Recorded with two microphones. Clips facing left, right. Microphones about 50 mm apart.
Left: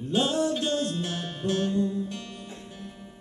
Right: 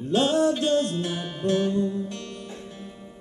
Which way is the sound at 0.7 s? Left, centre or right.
Centre.